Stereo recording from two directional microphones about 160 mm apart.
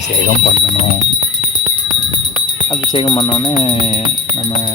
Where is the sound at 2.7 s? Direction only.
30° left (ahead or behind).